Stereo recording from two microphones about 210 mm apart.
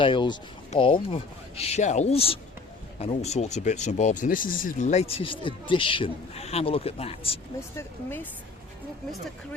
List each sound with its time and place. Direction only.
0.0 s speech: 25° left (ahead or behind)
7.8 s speech: 10° left (ahead or behind)